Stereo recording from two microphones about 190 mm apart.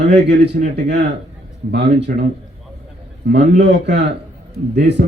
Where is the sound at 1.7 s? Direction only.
65° right (ahead or behind).